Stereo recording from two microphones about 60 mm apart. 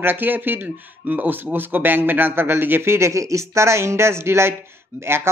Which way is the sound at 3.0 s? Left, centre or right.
Right.